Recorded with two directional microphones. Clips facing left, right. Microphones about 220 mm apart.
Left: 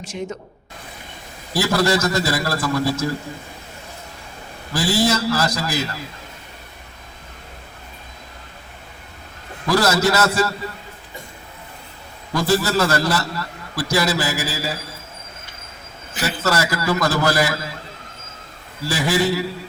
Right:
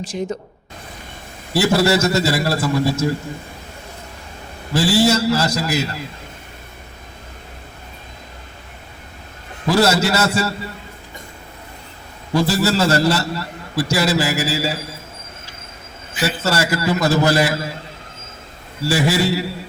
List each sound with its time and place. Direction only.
0.1 s speech: 35° right (ahead or behind)
1.5 s a man's voice: 25° right (ahead or behind)
4.7 s a man's voice: 25° right (ahead or behind)
9.6 s a man's voice: 25° right (ahead or behind)
12.3 s a man's voice: 25° right (ahead or behind)
16.4 s a man's voice: 25° right (ahead or behind)
18.9 s a man's voice: 25° right (ahead or behind)